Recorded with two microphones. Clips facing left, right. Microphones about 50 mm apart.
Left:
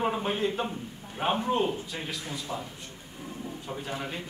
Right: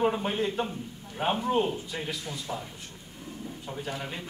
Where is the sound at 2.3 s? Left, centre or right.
Centre.